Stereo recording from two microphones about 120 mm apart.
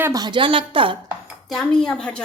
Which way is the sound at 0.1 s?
35° right (ahead or behind).